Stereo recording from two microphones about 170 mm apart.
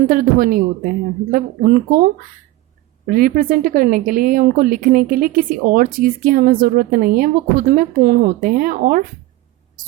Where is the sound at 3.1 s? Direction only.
55° right (ahead or behind).